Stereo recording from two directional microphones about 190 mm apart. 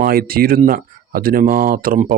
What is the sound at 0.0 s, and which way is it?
Speech, 50° right (ahead or behind).